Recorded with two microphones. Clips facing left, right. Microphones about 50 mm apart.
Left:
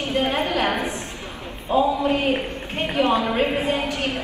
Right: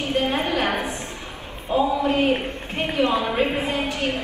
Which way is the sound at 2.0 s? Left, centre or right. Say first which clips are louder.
Right 1 dB; left.